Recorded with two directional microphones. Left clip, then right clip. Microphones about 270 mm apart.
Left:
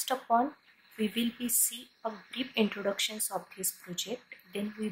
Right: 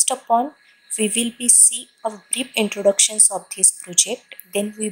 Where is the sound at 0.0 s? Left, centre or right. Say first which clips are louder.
Right 9 dB; centre.